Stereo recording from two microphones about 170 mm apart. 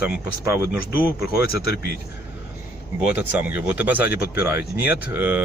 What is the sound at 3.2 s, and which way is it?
Speech, 10° right (ahead or behind).